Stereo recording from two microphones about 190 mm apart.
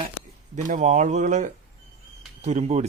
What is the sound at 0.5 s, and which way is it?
Speech, 40° right (ahead or behind).